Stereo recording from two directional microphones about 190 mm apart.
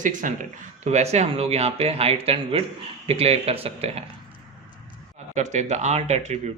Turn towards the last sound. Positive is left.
turn(degrees=-35)  # may be behind; listen again after turning